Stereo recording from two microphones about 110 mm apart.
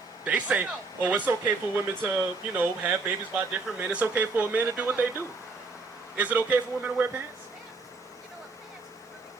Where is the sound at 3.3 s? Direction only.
10° right (ahead or behind).